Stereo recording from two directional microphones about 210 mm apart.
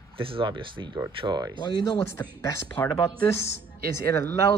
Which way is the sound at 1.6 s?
20° left (ahead or behind).